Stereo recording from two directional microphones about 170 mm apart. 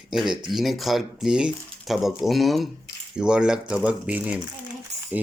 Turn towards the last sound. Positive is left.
turn(degrees=-10)  # may be behind; listen again after turning